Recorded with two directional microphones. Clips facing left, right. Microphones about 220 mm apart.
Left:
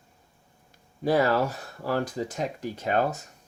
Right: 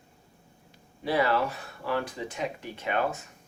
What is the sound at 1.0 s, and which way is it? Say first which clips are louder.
Speech: left 3 dB; 45° left (ahead or behind).